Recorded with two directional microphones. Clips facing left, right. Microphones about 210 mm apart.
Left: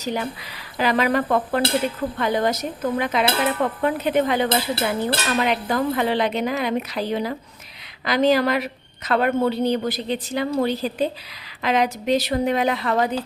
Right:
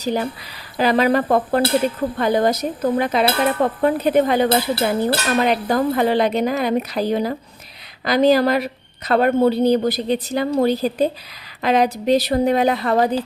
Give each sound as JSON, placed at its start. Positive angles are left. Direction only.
{"t": 0.0, "sound": "a woman's voice", "side_deg": -35}